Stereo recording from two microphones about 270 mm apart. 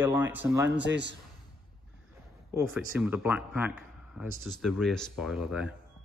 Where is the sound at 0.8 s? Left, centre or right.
Right.